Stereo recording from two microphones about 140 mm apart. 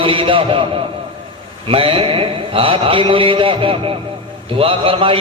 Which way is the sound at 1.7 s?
40° right (ahead or behind).